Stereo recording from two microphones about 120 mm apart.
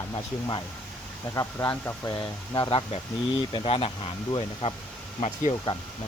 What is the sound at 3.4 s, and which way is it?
Speech, 45° left (ahead or behind).